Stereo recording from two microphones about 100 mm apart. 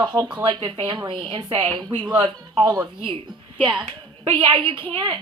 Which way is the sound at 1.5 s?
70° right (ahead or behind).